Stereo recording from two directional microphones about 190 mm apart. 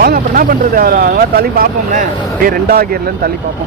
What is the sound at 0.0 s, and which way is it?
Speech, 50° right (ahead or behind).